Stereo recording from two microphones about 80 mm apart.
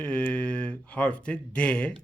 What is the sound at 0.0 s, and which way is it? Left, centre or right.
Speech, centre.